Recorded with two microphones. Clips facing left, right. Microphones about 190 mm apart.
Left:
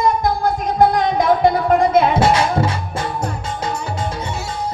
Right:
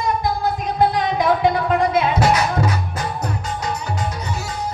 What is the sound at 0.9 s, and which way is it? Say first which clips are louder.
Music: left 3 dB; 45° left (ahead or behind).